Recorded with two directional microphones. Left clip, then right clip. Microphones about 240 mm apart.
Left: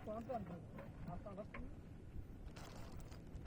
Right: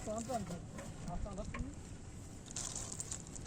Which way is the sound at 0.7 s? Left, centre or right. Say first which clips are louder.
Right 6 dB; centre.